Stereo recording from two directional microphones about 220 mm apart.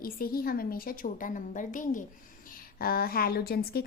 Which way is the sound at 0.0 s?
40° left (ahead or behind).